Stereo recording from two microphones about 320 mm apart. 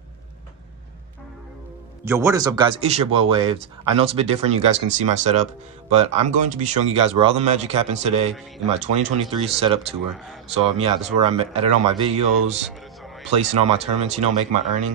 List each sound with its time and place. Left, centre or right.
2.0 s speech: centre